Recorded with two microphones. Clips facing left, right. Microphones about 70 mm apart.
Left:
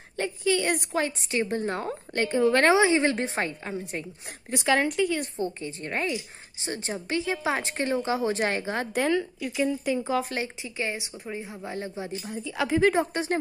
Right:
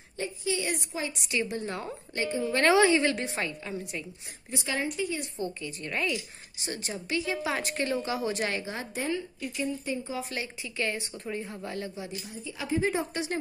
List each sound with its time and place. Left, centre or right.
0.2 s a woman's voice: left
1.1 s a woman's voice: left
2.6 s a woman's voice: left
4.5 s a woman's voice: left
5.4 s a woman's voice: left
8.9 s a woman's voice: left
9.8 s speech: left
10.3 s a woman's voice: left
12.4 s a woman's voice: left
12.9 s speech: left